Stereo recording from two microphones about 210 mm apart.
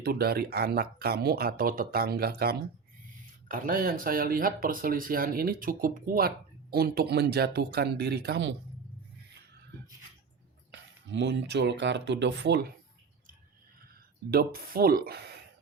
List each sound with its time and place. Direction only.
0.0 s speech: 45° right (ahead or behind)
10.7 s speech: 60° right (ahead or behind)
14.3 s speech: 45° right (ahead or behind)